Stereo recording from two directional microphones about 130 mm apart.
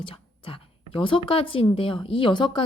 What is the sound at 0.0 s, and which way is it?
Whispering, 45° left (ahead or behind).